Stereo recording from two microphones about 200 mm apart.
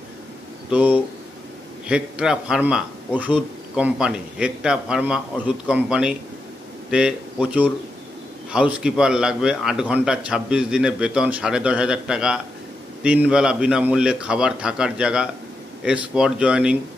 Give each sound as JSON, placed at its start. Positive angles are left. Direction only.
{"t": 0.7, "sound": "a man's voice", "side_deg": -5}